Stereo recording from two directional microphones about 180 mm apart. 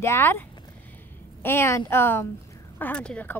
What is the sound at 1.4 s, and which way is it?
Speech, 15° left (ahead or behind).